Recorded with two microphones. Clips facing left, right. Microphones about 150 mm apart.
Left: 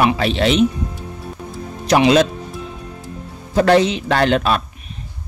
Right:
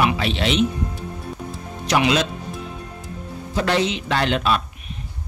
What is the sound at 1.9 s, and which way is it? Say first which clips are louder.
Speech: left 5 dB; 40° left (ahead or behind).